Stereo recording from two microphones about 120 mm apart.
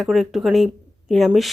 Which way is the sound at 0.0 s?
Centre (ahead or behind).